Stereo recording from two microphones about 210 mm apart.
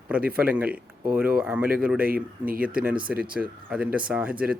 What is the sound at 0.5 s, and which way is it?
Speech, 5° right (ahead or behind).